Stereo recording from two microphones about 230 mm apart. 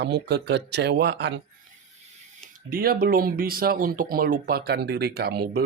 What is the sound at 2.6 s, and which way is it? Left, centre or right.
Speech, right.